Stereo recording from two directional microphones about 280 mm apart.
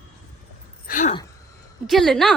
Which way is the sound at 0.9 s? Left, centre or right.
Left.